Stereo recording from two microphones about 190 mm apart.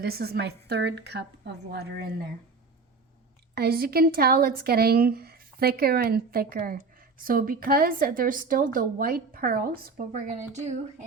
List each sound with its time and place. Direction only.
0.0 s a woman's voice: 55° right (ahead or behind)
3.5 s speech: 55° right (ahead or behind)